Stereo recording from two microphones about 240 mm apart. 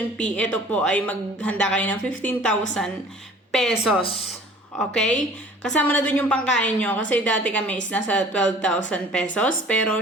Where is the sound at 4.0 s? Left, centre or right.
Left.